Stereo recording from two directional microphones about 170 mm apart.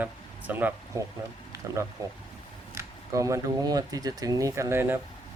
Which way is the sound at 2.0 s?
20° right (ahead or behind).